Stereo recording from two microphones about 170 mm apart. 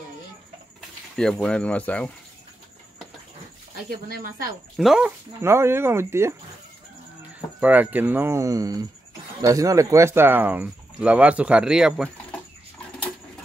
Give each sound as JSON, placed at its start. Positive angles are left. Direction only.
{"t": 0.7, "sound": "speech", "side_deg": 5}
{"t": 4.1, "sound": "speech", "side_deg": -55}
{"t": 4.7, "sound": "speech", "side_deg": -5}
{"t": 5.4, "sound": "speech", "side_deg": -15}
{"t": 7.6, "sound": "speech", "side_deg": -10}